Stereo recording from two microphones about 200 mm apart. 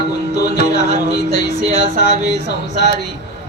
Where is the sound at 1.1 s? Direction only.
55° left (ahead or behind).